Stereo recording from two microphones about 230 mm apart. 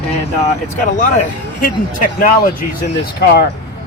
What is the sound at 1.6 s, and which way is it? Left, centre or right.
Speech, left.